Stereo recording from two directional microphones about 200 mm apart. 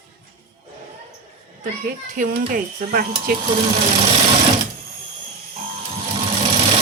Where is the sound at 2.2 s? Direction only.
45° right (ahead or behind).